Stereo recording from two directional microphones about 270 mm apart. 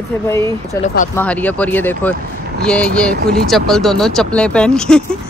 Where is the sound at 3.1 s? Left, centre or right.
Right.